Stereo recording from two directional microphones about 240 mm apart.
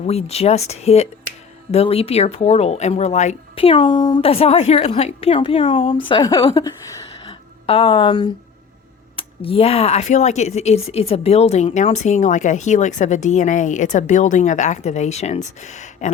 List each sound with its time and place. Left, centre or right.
0.0 s a woman's voice: left